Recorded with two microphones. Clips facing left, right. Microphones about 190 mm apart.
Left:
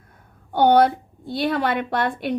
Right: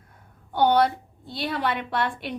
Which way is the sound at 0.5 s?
45° left (ahead or behind).